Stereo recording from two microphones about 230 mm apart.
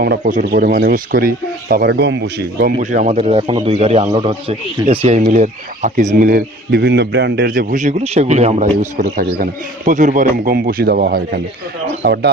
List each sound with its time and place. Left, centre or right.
0.0 s a man's voice: right
2.7 s a man's voice: right